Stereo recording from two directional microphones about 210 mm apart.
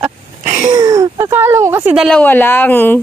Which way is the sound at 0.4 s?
35° right (ahead or behind).